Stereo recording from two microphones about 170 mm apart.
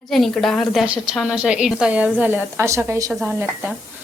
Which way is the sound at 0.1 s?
Centre (ahead or behind).